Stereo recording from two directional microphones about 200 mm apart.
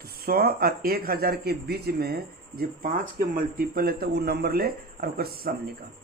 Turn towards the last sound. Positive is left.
turn(degrees=-50)  # may be behind; listen again after turning